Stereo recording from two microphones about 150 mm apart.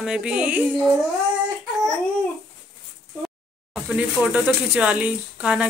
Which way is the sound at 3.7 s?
5° right (ahead or behind).